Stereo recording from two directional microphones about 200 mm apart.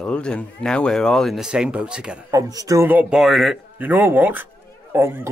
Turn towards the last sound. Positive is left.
turn(degrees=-10)  # may be behind; listen again after turning